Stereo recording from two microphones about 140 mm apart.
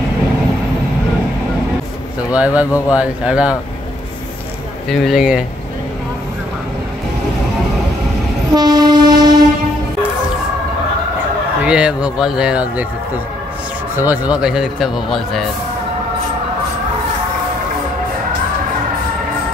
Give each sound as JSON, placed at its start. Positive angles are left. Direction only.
{"t": 2.3, "sound": "speech", "side_deg": -10}
{"t": 4.8, "sound": "speech", "side_deg": 0}
{"t": 8.5, "sound": "train", "side_deg": -30}
{"t": 11.6, "sound": "speech", "side_deg": -5}
{"t": 13.9, "sound": "speech", "side_deg": -10}